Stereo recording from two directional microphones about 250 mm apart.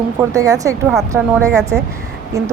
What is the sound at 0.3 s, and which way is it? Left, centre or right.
Speech, centre.